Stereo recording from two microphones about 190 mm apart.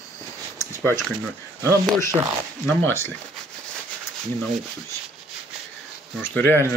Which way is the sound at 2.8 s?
15° left (ahead or behind).